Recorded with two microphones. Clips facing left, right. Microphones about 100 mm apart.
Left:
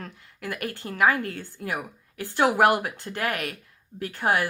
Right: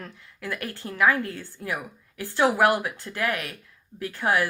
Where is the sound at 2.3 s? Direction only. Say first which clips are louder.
Left 1 dB; 20° left (ahead or behind).